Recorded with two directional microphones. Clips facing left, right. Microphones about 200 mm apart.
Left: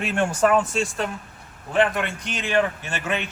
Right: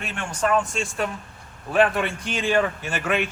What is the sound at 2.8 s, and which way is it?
Speech, 10° right (ahead or behind).